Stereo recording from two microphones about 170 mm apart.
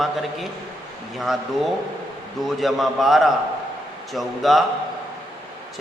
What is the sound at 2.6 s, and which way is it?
A man's voice, centre (ahead or behind).